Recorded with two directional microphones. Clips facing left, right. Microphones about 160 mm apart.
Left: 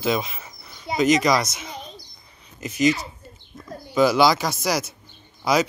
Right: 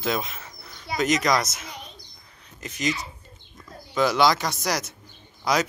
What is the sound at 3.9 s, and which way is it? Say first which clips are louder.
Speech: left 3 dB; 5° left (ahead or behind).